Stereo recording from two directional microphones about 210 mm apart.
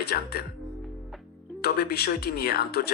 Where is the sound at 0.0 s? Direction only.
50° left (ahead or behind).